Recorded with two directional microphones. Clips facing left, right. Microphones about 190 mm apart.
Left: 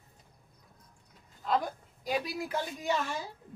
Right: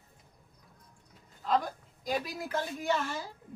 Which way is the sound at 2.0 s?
10° left (ahead or behind).